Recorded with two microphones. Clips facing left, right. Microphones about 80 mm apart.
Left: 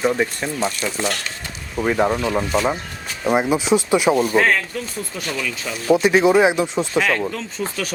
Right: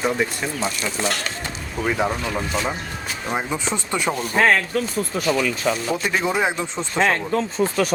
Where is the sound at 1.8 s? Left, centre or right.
Centre.